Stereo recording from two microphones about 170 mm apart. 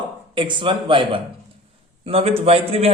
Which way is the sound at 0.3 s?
30° right (ahead or behind).